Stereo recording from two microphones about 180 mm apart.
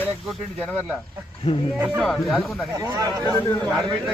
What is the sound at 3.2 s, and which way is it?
Speech, 15° left (ahead or behind).